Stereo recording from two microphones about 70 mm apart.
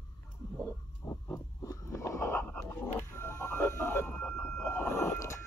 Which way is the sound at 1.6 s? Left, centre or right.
Left.